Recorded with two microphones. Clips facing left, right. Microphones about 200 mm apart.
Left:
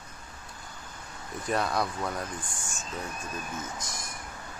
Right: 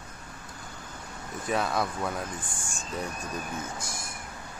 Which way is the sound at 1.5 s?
Centre (ahead or behind).